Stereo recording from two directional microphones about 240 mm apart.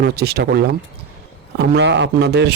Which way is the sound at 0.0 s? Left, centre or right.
Right.